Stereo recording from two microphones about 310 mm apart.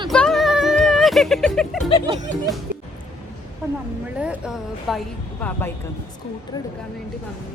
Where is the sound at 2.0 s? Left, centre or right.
Right.